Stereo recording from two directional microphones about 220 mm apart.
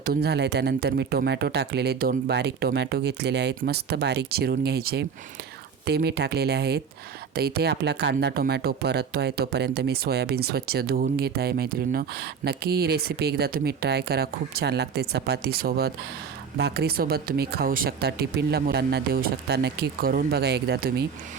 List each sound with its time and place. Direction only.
0.0 s speech: 45° right (ahead or behind)